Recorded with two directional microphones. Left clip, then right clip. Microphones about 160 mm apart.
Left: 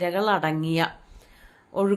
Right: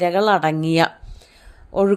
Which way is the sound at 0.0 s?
45° right (ahead or behind).